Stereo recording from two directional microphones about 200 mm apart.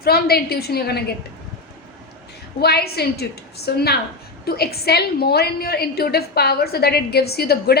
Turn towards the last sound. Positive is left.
turn(degrees=50)  # may be behind; listen again after turning